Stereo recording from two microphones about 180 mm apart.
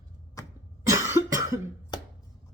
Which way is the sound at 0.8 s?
15° right (ahead or behind).